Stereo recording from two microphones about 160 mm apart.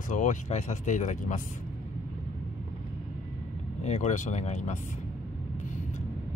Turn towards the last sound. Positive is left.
turn(degrees=45)  # may be behind; listen again after turning